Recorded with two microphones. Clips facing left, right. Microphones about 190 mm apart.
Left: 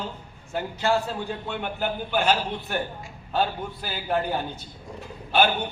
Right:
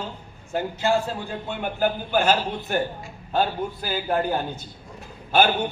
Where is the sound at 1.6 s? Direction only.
45° right (ahead or behind).